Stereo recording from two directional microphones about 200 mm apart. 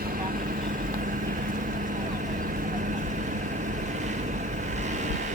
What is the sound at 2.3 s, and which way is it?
Vehicle, 40° right (ahead or behind).